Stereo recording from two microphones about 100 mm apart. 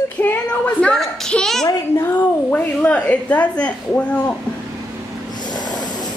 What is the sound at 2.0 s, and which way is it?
A woman's voice, 20° left (ahead or behind).